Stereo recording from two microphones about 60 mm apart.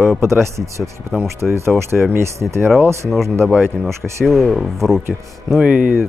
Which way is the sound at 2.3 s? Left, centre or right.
Right.